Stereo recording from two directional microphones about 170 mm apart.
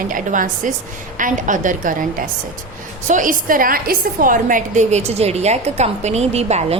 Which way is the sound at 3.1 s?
50° right (ahead or behind).